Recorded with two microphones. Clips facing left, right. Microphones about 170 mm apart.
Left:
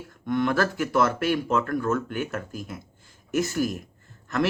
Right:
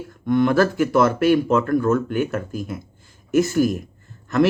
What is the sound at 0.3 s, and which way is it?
Speech, 15° right (ahead or behind).